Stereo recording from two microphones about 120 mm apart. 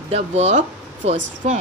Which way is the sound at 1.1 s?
90° right.